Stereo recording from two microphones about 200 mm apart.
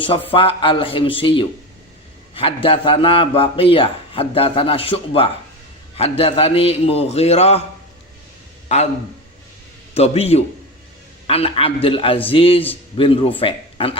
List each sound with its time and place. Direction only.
0.0 s a man's voice: 25° left (ahead or behind)
9.9 s a man's voice: 30° left (ahead or behind)